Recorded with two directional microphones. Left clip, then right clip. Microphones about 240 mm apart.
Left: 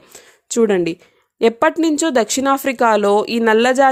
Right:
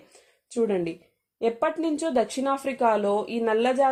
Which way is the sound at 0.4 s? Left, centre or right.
Left.